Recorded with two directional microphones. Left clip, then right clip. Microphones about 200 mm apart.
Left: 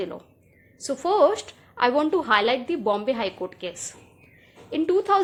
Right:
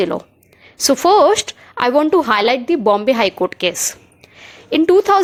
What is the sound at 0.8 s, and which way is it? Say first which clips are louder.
A woman's voice: right 9 dB; 40° right (ahead or behind).